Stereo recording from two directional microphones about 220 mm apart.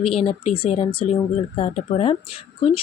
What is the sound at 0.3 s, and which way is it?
Speech, 25° left (ahead or behind).